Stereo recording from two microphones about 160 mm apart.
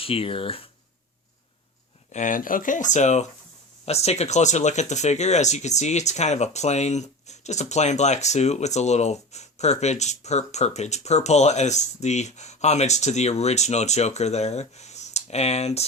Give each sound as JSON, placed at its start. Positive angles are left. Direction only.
{"t": 0.0, "sound": "speech", "side_deg": 35}
{"t": 2.1, "sound": "speech", "side_deg": 55}